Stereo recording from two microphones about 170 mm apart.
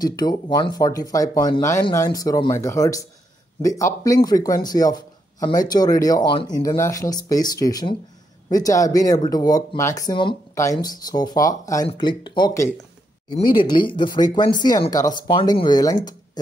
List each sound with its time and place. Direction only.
0.0 s speech: 20° left (ahead or behind)